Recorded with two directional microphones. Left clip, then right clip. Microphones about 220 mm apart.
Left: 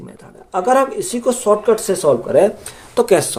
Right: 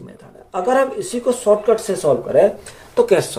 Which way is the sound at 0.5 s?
50° left (ahead or behind).